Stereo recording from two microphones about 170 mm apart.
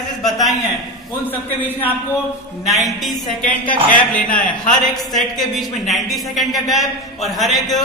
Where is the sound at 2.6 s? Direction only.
Centre (ahead or behind).